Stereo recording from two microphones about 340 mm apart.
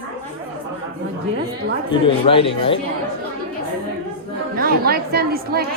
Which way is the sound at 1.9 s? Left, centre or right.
Centre.